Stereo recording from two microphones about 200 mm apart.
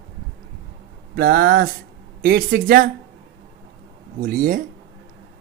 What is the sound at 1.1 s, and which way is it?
Speech, 50° right (ahead or behind).